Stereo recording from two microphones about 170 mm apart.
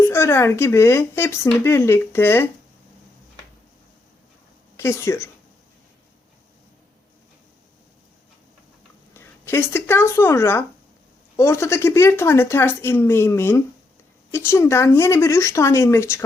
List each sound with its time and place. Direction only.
0.0 s speech: 15° left (ahead or behind)
4.8 s speech: 15° left (ahead or behind)
9.1 s speech: 15° left (ahead or behind)